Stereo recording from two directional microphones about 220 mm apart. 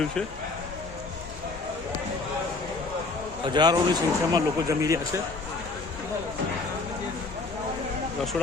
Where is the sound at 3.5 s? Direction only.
20° right (ahead or behind).